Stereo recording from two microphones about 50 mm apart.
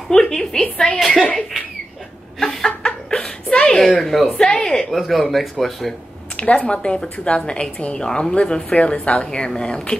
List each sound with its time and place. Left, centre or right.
0.1 s a woman's voice: centre
0.9 s speech: centre
2.4 s a sound: centre
4.0 s speech: centre
4.4 s a woman's voice: centre
4.9 s speech: centre
6.3 s speech: left